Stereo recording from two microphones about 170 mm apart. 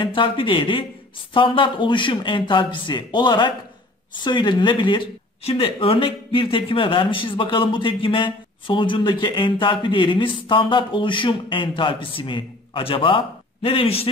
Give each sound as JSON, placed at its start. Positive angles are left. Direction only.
{"t": 0.0, "sound": "speech", "side_deg": 30}